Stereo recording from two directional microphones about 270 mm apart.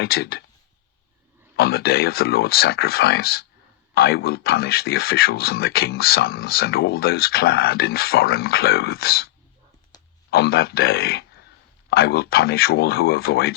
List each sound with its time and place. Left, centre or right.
0.0 s speech: left
1.5 s speech: left